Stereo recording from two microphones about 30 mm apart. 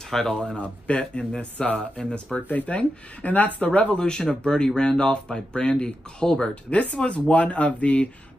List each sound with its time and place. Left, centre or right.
0.1 s speech: centre
0.6 s speech: left
1.6 s speech: left
2.4 s speech: left
2.7 s speech: left
3.9 s speech: left
6.5 s speech: left